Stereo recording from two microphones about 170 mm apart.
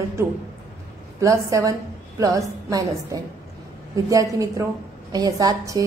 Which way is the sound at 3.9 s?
20° right (ahead or behind).